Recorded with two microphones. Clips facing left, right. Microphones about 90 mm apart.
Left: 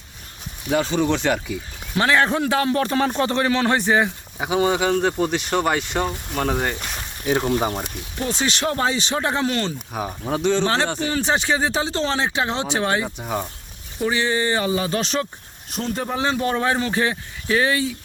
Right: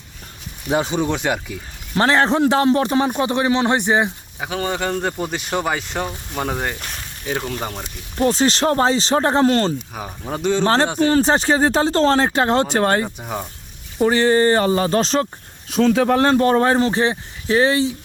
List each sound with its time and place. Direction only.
0.8 s speech: 15° right (ahead or behind)
2.0 s a man's voice: 30° right (ahead or behind)
4.4 s speech: 15° left (ahead or behind)
8.2 s speech: 35° right (ahead or behind)
9.9 s speech: 5° left (ahead or behind)
10.6 s speech: 40° right (ahead or behind)
13.1 s speech: centre (ahead or behind)
14.0 s speech: 40° right (ahead or behind)
15.8 s speech: 90° right
16.2 s speech: 50° right (ahead or behind); by 17.9 s 30° right (ahead or behind)